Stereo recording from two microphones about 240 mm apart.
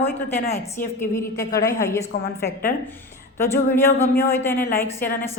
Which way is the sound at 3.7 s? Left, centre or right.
Centre.